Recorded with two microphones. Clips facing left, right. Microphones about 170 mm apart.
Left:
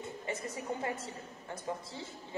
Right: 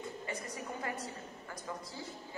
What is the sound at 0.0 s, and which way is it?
A woman's voice, 25° left (ahead or behind).